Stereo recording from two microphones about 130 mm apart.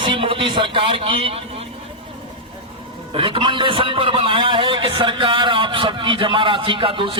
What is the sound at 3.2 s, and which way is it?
A man's voice, 40° right (ahead or behind).